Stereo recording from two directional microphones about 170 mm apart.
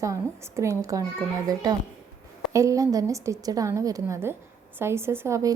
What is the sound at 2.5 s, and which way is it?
A woman's voice, 20° right (ahead or behind).